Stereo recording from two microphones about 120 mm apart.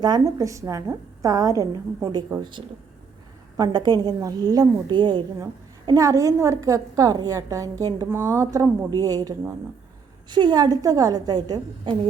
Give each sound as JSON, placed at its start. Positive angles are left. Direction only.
{"t": 0.0, "sound": "a woman's voice", "side_deg": -30}
{"t": 2.4, "sound": "a woman's voice", "side_deg": -40}
{"t": 10.2, "sound": "a woman's voice", "side_deg": -40}